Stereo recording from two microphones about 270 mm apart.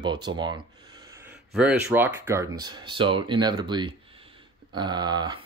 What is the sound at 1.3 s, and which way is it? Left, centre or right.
Speech, centre.